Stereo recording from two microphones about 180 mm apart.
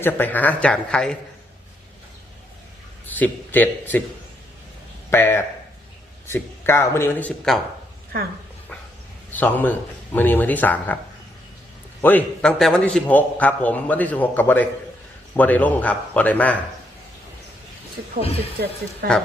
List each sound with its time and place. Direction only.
0.0 s a man's voice: 10° left (ahead or behind)
3.2 s a man's voice: 10° left (ahead or behind)
5.1 s a man's voice: 10° left (ahead or behind)
9.3 s a man's voice: 10° left (ahead or behind)
12.0 s a man's voice: 5° left (ahead or behind)
19.0 s speech: 55° right (ahead or behind)